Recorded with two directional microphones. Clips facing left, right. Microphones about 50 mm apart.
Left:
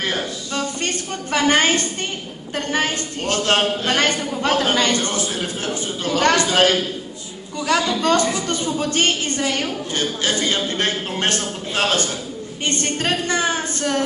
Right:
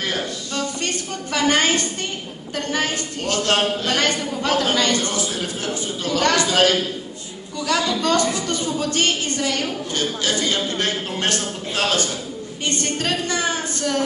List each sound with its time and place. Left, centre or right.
0.0 s a woman's voice: left